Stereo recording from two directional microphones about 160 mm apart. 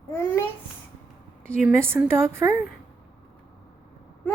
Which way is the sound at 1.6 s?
10° right (ahead or behind).